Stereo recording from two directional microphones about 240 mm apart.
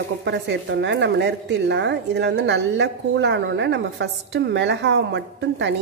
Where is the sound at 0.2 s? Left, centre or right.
Right.